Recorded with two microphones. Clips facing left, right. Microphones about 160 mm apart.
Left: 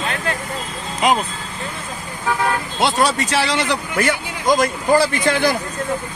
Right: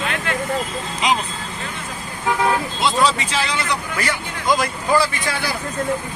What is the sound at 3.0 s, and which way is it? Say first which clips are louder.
Speech: left 1 dB; 65° left (ahead or behind).